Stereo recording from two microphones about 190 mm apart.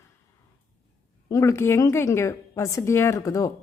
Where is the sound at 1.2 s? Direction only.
15° left (ahead or behind).